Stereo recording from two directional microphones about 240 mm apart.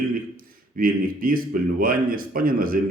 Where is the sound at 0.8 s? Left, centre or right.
Right.